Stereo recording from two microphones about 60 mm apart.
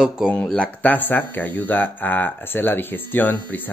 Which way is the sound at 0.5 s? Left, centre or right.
Left.